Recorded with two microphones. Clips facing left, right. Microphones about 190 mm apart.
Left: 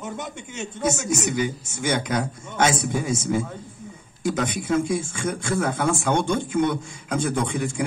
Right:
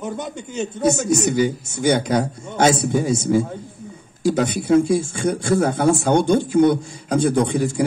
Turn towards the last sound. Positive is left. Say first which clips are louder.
# right 6 dB
turn(degrees=-35)  # may be behind; listen again after turning